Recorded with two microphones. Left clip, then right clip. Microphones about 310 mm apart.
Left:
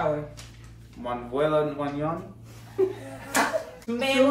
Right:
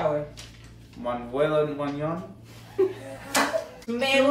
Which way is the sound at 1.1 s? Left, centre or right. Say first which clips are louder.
Even; centre.